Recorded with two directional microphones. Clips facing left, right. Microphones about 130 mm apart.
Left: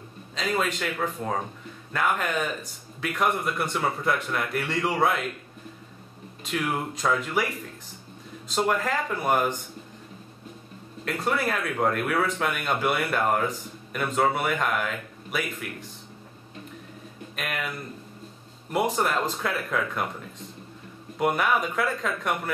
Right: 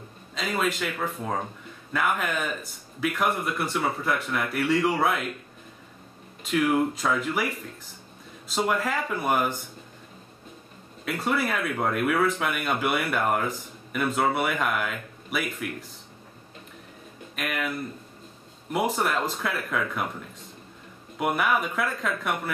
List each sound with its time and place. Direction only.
0.3 s speech: 5° right (ahead or behind)
6.4 s speech: centre (ahead or behind)
8.5 s speech: 5° right (ahead or behind)
11.1 s speech: 5° right (ahead or behind)
17.4 s speech: centre (ahead or behind)
18.7 s speech: centre (ahead or behind)
21.2 s speech: centre (ahead or behind)